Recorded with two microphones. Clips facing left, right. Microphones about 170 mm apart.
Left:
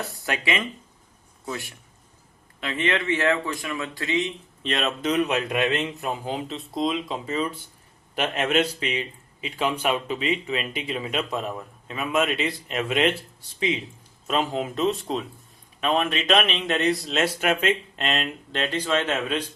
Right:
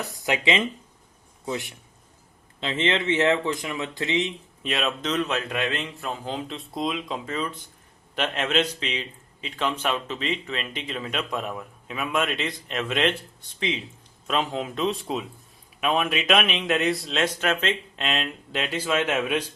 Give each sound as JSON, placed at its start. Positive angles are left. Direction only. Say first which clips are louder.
{"t": 0.0, "sound": "speech", "louder": "right 3 dB", "side_deg": -15}
{"t": 4.6, "sound": "a man's voice", "louder": "left 2 dB", "side_deg": 0}
{"t": 14.3, "sound": "speech", "louder": "left 1 dB", "side_deg": 5}